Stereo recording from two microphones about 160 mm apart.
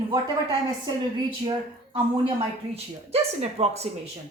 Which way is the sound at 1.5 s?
30° right (ahead or behind).